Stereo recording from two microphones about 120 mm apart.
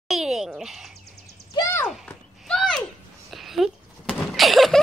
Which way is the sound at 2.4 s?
5° left (ahead or behind).